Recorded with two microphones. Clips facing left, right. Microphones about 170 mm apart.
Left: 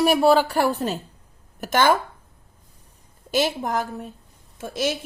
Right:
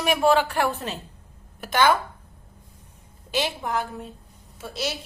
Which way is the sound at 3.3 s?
40° left (ahead or behind).